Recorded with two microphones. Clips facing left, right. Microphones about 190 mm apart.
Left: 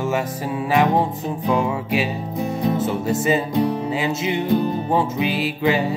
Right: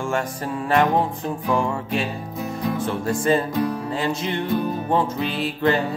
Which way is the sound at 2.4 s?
25° left (ahead or behind).